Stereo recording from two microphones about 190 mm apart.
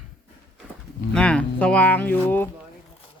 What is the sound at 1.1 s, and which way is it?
Speech, 5° left (ahead or behind).